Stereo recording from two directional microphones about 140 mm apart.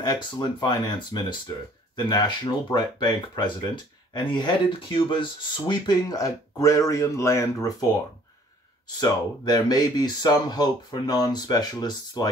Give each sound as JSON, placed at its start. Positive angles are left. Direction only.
{"t": 0.0, "sound": "speech", "side_deg": 30}